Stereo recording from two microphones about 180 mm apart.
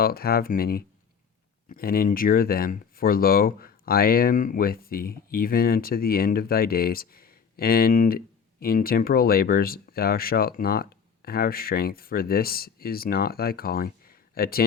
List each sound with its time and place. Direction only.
0.0 s speech: 55° left (ahead or behind)